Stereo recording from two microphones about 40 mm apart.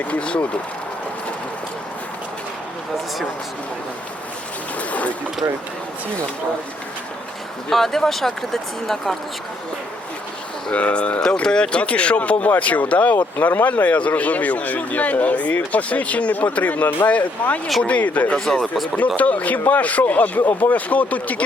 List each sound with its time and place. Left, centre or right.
0.1 s speech: left
4.8 s speech: left
7.7 s speech: centre
10.7 s speech: left
11.4 s speech: left